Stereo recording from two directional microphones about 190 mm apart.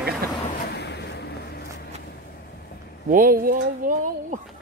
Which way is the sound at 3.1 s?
50° right (ahead or behind).